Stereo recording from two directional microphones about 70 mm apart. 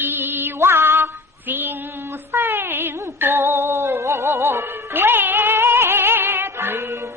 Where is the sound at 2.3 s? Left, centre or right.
Right.